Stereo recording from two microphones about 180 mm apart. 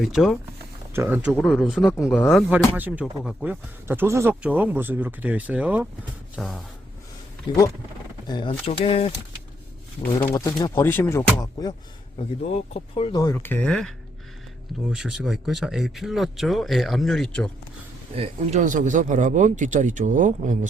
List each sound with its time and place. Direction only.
0.0 s speech: centre (ahead or behind)
1.4 s speech: 5° left (ahead or behind)
1.9 s speech: 15° left (ahead or behind)
2.3 s speech: 10° right (ahead or behind)
7.5 s speech: 25° left (ahead or behind)
10.3 s speech: 20° left (ahead or behind)
12.5 s speech: 35° left (ahead or behind); by 17.5 s 5° left (ahead or behind)
18.2 s a man's voice: 40° right (ahead or behind)